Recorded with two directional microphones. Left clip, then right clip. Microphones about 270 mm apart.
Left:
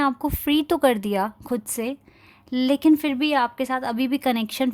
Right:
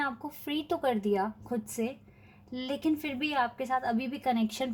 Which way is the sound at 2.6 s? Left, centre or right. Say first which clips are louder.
Left 12 dB; left.